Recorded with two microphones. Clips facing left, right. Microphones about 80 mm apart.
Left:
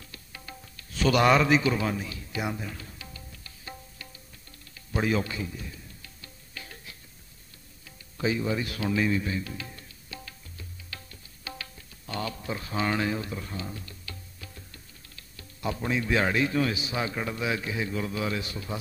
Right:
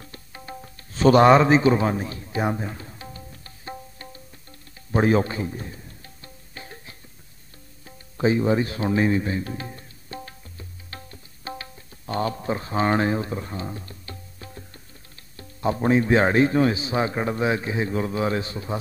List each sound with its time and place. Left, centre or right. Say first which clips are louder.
0.0 s music: right 5 dB; right